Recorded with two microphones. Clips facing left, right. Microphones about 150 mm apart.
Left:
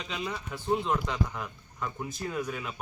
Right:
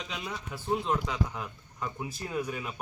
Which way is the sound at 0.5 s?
5° right (ahead or behind).